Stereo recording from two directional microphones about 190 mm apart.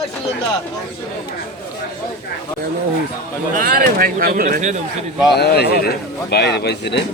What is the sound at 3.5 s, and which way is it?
Speech, 45° right (ahead or behind).